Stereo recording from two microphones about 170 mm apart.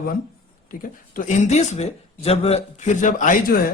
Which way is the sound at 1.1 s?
45° left (ahead or behind).